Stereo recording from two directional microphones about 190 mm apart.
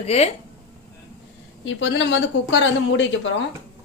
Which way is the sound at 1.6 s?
75° left (ahead or behind).